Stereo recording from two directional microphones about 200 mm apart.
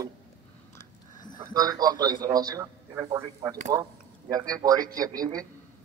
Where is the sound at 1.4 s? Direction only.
20° right (ahead or behind).